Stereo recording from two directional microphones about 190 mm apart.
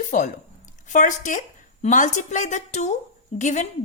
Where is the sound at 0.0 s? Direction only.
40° left (ahead or behind).